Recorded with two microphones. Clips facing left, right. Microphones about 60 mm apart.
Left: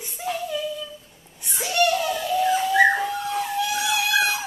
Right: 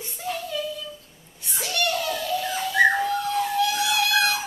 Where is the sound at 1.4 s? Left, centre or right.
Centre.